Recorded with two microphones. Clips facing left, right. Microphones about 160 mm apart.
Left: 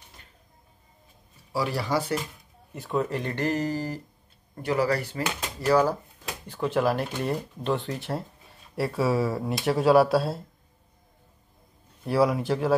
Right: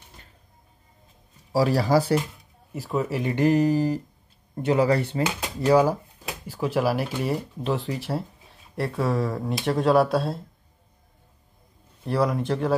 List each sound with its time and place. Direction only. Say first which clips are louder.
1.5 s speech: right 6 dB; 35° right (ahead or behind)
2.7 s speech: right 1 dB; 5° right (ahead or behind)
12.0 s speech: left 1 dB; centre (ahead or behind)